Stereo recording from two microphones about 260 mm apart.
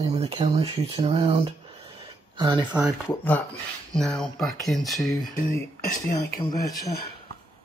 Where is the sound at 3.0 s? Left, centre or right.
Centre.